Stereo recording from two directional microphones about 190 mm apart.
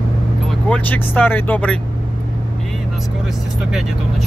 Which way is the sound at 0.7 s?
10° left (ahead or behind).